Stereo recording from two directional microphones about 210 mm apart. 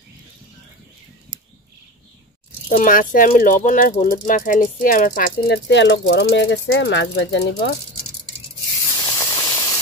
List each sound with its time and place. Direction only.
2.7 s speech: 40° left (ahead or behind)
5.7 s speech: 55° left (ahead or behind)
8.9 s a sound: 20° left (ahead or behind)